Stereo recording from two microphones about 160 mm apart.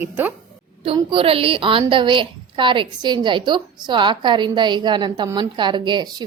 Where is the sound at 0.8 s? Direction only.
35° right (ahead or behind).